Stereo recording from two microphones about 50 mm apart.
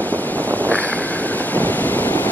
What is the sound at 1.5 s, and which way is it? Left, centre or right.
Wind noise, left.